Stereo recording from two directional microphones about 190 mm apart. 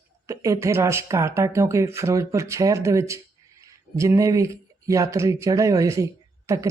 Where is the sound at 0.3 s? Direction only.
15° right (ahead or behind).